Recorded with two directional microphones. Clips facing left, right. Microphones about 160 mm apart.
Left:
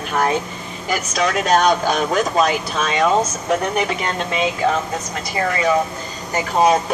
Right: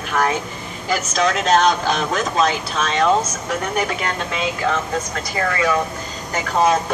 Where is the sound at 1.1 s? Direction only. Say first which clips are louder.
Even; 10° left (ahead or behind).